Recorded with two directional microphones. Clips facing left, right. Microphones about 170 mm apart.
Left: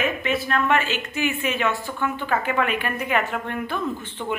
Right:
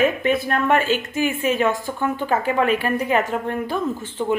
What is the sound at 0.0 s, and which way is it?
A woman's voice, 45° right (ahead or behind).